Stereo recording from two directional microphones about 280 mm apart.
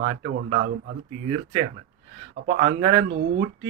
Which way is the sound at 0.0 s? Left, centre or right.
Right.